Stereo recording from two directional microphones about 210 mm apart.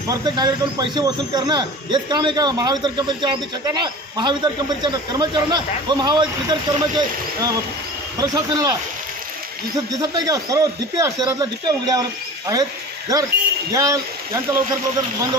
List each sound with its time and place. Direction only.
0.1 s speech: 20° right (ahead or behind)
10.0 s speech: 20° right (ahead or behind)
13.7 s speech: 15° right (ahead or behind)